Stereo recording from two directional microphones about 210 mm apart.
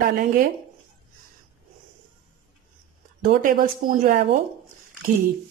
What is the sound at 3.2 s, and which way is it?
A woman's voice, 40° right (ahead or behind).